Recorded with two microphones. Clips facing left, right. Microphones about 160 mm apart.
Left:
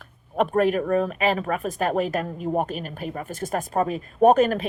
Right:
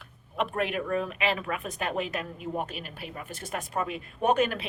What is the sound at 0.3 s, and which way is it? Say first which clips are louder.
Speech: left 9 dB; 40° left (ahead or behind).